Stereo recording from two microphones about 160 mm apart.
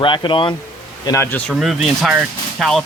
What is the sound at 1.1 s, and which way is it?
Speech, 15° left (ahead or behind).